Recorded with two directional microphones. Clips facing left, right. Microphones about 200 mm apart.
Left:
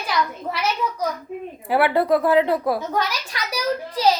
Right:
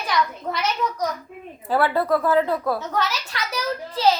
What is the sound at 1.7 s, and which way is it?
A woman's voice, 15° left (ahead or behind).